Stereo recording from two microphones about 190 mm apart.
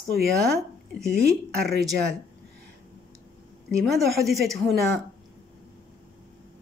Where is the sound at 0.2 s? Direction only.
Centre (ahead or behind).